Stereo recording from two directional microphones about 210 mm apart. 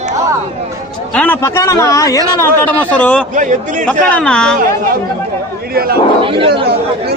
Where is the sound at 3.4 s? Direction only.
35° right (ahead or behind).